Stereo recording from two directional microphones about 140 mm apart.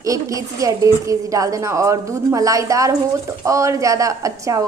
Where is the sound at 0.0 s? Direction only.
25° right (ahead or behind).